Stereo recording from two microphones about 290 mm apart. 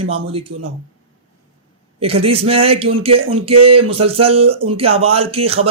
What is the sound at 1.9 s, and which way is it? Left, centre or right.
Speech, centre.